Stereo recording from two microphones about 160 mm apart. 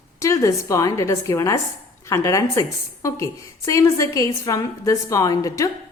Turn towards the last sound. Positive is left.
turn(degrees=20)  # may be behind; listen again after turning